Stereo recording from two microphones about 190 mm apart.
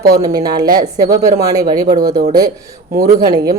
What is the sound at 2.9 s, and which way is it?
Speech, 50° right (ahead or behind).